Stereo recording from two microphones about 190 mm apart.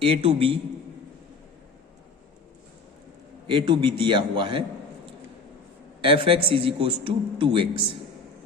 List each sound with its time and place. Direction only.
0.0 s a man's voice: 30° right (ahead or behind)
3.4 s a man's voice: 25° right (ahead or behind)
6.0 s a man's voice: 30° right (ahead or behind)